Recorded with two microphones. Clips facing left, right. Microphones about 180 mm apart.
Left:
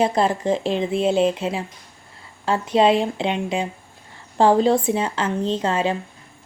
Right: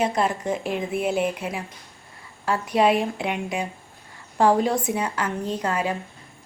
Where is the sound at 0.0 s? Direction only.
30° left (ahead or behind).